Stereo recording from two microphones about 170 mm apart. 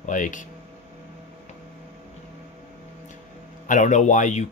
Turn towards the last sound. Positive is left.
turn(degrees=45)  # may be behind; listen again after turning